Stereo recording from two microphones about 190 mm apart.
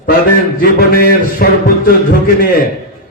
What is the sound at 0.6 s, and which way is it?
A man's voice, 55° left (ahead or behind).